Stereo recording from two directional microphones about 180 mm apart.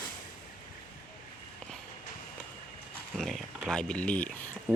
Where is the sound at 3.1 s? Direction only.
Centre (ahead or behind).